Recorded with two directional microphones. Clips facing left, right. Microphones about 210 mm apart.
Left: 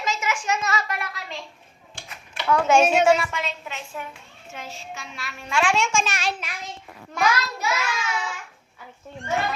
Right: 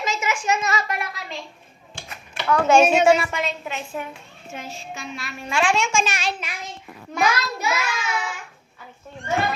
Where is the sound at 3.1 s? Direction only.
10° right (ahead or behind).